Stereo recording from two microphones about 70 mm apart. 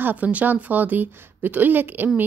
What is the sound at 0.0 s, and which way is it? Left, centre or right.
A woman's voice, right.